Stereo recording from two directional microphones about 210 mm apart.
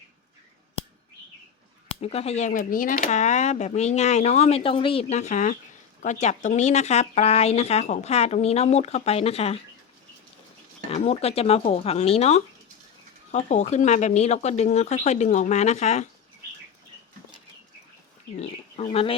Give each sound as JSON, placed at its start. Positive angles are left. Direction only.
{"t": 2.0, "sound": "speech", "side_deg": 30}
{"t": 10.9, "sound": "speech", "side_deg": 30}
{"t": 18.3, "sound": "speech", "side_deg": 30}